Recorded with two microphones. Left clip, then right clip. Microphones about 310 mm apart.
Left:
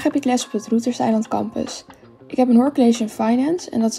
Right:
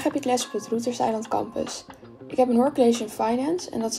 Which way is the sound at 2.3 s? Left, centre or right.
Left.